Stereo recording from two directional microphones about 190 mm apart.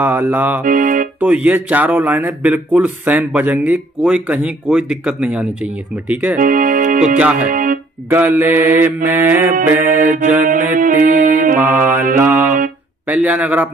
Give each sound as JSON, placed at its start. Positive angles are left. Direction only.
{"t": 0.0, "sound": "a man's voice", "side_deg": -10}
{"t": 0.7, "sound": "music", "side_deg": -45}
{"t": 1.2, "sound": "a man's voice", "side_deg": -10}
{"t": 6.3, "sound": "speech", "side_deg": -45}
{"t": 7.2, "sound": "a man's voice", "side_deg": -5}
{"t": 7.4, "sound": "music", "side_deg": -45}
{"t": 8.1, "sound": "a man's voice", "side_deg": -10}
{"t": 10.4, "sound": "music", "side_deg": -45}
{"t": 11.6, "sound": "a man's voice", "side_deg": -10}
{"t": 12.2, "sound": "music", "side_deg": -10}
{"t": 13.0, "sound": "a man's voice", "side_deg": -10}